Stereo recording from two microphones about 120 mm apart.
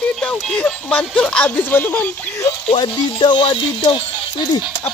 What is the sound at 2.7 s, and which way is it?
Music, 40° left (ahead or behind).